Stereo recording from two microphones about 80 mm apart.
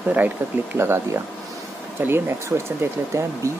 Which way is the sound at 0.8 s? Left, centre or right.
Right.